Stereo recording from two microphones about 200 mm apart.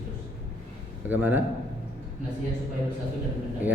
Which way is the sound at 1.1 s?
10° right (ahead or behind).